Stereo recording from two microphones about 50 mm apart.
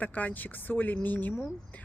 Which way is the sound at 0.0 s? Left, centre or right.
Left.